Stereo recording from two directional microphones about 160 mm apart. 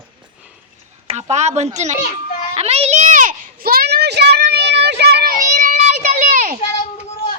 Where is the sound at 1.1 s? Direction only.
40° right (ahead or behind).